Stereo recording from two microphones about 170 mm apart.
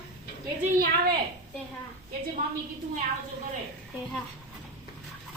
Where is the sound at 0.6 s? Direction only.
55° right (ahead or behind).